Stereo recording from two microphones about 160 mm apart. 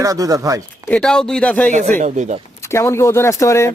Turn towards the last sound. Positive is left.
turn(degrees=15)  # may be behind; listen again after turning